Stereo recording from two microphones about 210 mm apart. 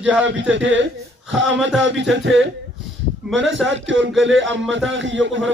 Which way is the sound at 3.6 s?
60° right (ahead or behind).